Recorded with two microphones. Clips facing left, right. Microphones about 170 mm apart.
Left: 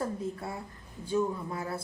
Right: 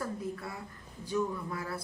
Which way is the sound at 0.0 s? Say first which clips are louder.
Left 3 dB; 25° left (ahead or behind).